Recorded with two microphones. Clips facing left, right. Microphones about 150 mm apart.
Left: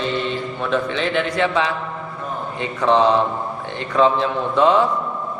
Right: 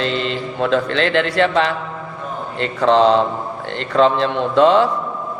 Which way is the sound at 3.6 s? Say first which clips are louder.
Right 2 dB; 80° right.